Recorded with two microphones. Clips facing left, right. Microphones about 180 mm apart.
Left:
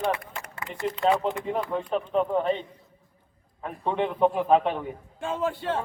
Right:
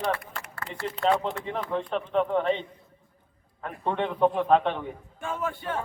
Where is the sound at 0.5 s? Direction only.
15° left (ahead or behind).